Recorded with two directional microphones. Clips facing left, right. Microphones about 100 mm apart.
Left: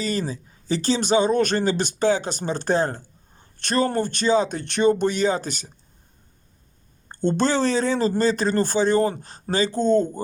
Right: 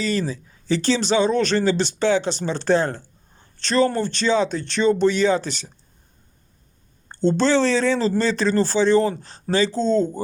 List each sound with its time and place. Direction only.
0.0 s speech: 40° left (ahead or behind)
3.6 s speech: 50° left (ahead or behind)
7.1 s speech: 50° left (ahead or behind)